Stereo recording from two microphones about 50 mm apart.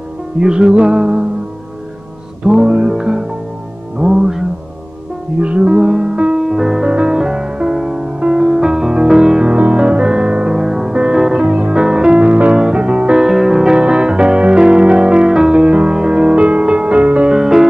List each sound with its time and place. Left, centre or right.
0.4 s music: centre
2.4 s music: centre
5.4 s music: right
6.4 s music: centre; by 17.3 s right
17.3 s music: centre